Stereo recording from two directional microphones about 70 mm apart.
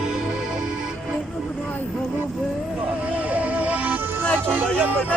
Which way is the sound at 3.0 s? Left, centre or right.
Right.